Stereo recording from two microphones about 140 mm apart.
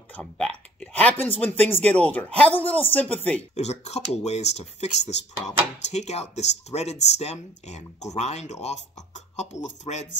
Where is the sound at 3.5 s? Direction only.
50° left (ahead or behind).